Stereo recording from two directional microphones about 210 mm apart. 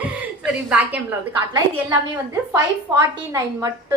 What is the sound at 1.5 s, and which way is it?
A woman's voice, 20° right (ahead or behind).